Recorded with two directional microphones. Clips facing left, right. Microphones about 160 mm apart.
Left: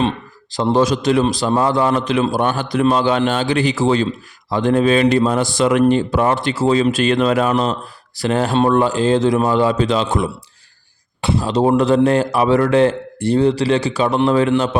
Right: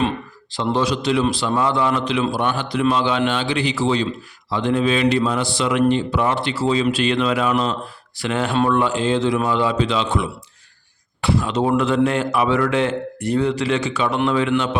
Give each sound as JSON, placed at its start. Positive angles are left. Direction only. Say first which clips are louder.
{"t": 0.5, "sound": "a man's voice", "louder": "left 5 dB", "side_deg": 40}
{"t": 11.2, "sound": "speech", "louder": "left 1 dB", "side_deg": 25}
{"t": 11.4, "sound": "speech", "louder": "left 7 dB", "side_deg": 35}